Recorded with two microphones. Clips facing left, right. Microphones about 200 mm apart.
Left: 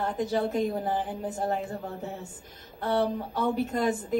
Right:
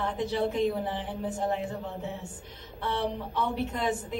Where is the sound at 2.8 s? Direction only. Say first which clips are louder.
Left 4 dB; 40° left (ahead or behind).